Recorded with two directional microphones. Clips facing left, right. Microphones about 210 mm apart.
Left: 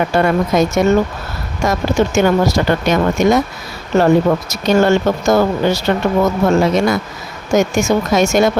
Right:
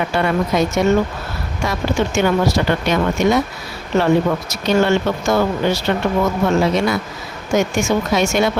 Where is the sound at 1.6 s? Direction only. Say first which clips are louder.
Left 4 dB; 45° left (ahead or behind).